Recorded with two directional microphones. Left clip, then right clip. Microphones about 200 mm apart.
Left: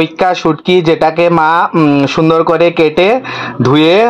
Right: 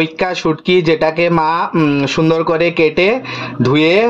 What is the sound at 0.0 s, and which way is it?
Speech, 15° left (ahead or behind).